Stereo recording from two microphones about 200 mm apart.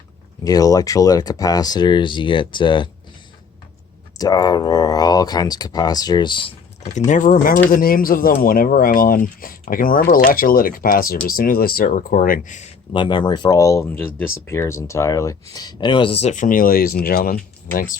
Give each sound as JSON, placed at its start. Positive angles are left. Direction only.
{"t": 0.4, "sound": "speech", "side_deg": 20}
{"t": 4.2, "sound": "speech", "side_deg": 20}
{"t": 7.1, "sound": "speech", "side_deg": 40}
{"t": 12.9, "sound": "speech", "side_deg": 25}